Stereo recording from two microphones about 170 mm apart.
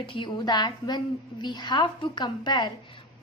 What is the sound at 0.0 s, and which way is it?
Speech, 30° left (ahead or behind).